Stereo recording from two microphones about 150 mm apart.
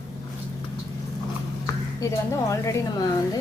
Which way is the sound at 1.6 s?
20° left (ahead or behind).